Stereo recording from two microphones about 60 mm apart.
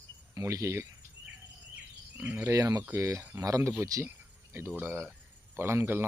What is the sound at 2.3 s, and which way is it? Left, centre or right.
Cricket, right.